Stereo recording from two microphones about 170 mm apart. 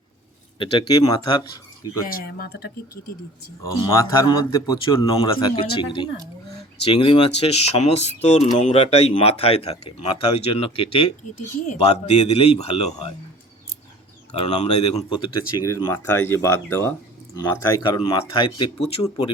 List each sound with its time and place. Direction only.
0.6 s speech: 25° left (ahead or behind)
2.0 s speech: 60° left (ahead or behind)
3.6 s speech: 15° left (ahead or behind); by 13.1 s 35° left (ahead or behind)
14.3 s speech: 40° left (ahead or behind)
15.7 s speech: 15° left (ahead or behind)